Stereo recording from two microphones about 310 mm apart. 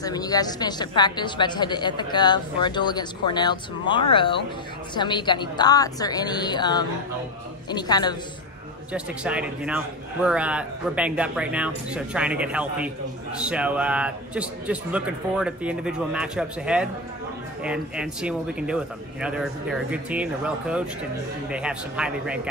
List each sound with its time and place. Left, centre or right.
0.0 s a woman's voice: centre
8.9 s speech: centre